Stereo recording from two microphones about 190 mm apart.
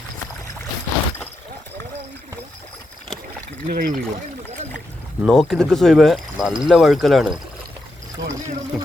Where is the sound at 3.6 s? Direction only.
45° right (ahead or behind).